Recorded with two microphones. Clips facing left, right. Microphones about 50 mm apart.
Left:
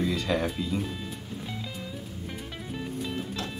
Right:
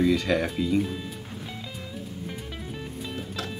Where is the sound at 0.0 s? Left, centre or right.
Centre.